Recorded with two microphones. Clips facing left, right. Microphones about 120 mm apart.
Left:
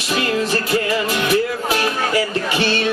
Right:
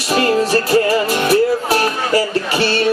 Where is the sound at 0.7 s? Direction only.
40° right (ahead or behind).